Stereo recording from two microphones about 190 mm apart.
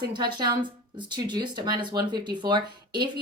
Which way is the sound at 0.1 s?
20° right (ahead or behind).